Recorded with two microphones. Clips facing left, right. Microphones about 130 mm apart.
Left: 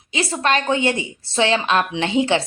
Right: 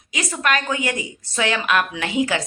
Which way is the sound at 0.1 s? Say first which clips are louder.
Left 3 dB; 30° left (ahead or behind).